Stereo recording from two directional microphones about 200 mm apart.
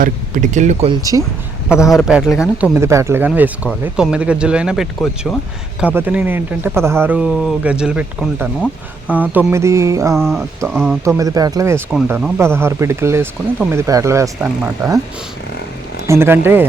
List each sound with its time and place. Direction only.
0.0 s speech: 40° right (ahead or behind)
1.9 s speech: centre (ahead or behind)
10.2 s speech: 5° left (ahead or behind)
10.6 s speech: 15° right (ahead or behind)
16.0 s speech: 10° right (ahead or behind)